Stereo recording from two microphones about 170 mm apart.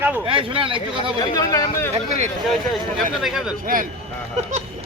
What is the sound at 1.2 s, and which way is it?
Speech, 20° left (ahead or behind).